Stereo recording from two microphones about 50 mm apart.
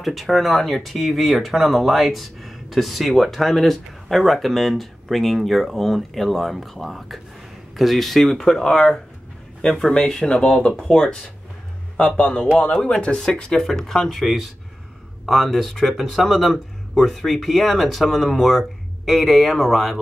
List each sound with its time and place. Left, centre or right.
0.0 s speech: centre
12.2 s speech: centre